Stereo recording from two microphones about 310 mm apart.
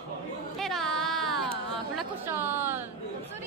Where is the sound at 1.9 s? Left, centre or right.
Centre.